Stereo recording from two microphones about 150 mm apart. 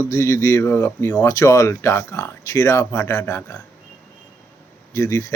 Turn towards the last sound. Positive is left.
turn(degrees=20)  # may be behind; listen again after turning